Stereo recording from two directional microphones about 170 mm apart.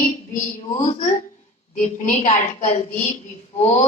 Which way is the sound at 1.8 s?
45° left (ahead or behind).